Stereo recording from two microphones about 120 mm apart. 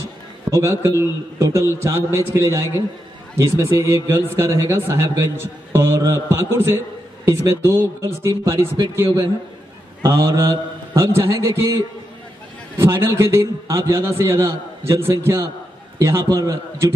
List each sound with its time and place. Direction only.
0.5 s a man's voice: 25° right (ahead or behind)